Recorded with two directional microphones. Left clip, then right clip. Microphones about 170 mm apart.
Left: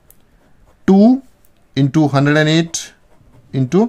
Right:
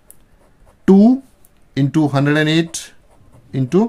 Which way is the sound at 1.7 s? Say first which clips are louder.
Left 2 dB; 20° left (ahead or behind).